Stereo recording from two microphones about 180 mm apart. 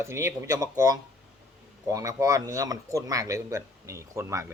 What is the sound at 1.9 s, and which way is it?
Speech, 15° right (ahead or behind).